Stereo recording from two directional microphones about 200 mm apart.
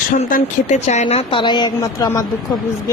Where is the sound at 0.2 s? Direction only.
40° left (ahead or behind); by 2.2 s 15° left (ahead or behind).